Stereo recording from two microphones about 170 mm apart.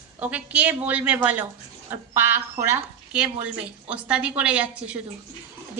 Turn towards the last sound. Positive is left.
turn(degrees=-5)  # may be behind; listen again after turning